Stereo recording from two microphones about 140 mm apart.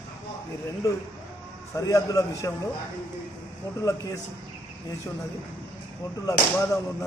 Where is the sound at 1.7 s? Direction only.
25° left (ahead or behind).